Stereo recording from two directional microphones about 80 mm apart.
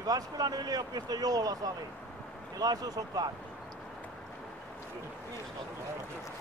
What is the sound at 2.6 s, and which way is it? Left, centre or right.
Speech, right.